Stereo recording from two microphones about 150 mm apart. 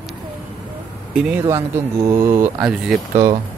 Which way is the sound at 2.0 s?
20° right (ahead or behind).